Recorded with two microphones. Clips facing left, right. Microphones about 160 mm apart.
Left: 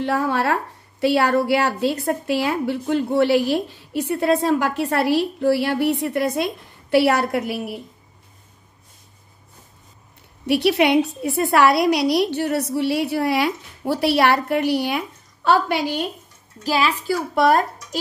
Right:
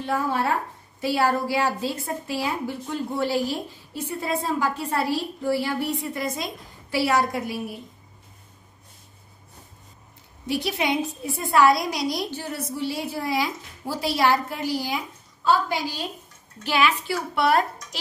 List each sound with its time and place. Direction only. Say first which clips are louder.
0.0 s a woman's voice: left 4 dB; 70° left (ahead or behind)
10.4 s a woman's voice: left 8 dB; 70° left (ahead or behind)
16.6 s a child's voice: left 2 dB; 35° left (ahead or behind)
17.4 s speech: left 4 dB; 45° left (ahead or behind)